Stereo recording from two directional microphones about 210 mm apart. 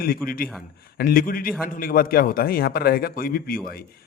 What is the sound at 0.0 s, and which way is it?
A man's voice, 45° left (ahead or behind).